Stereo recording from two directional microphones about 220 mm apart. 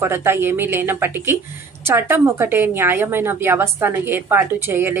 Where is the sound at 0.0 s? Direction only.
10° right (ahead or behind).